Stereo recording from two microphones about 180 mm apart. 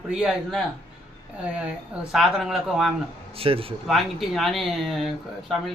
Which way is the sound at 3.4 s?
30° right (ahead or behind).